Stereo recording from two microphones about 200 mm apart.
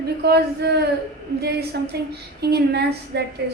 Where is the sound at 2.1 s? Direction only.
55° right (ahead or behind).